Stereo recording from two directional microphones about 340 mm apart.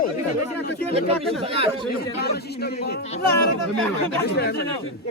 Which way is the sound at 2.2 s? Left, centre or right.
Left.